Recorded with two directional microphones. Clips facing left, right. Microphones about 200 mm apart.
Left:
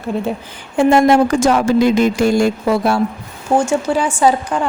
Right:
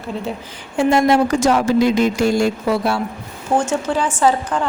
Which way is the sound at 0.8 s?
55° left (ahead or behind).